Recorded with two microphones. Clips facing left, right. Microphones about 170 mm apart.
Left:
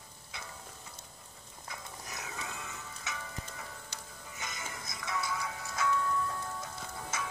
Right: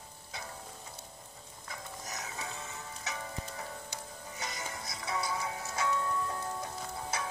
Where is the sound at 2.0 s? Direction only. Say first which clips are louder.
Right 1 dB; 40° right (ahead or behind).